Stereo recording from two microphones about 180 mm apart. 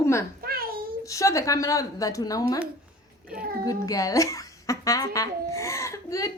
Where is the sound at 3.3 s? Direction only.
55° right (ahead or behind).